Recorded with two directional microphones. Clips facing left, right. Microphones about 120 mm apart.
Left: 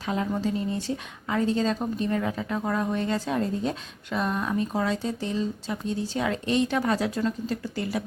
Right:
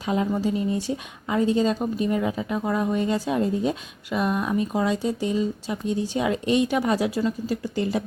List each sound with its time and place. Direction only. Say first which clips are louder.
0.0 s speech: right 3 dB; 15° right (ahead or behind)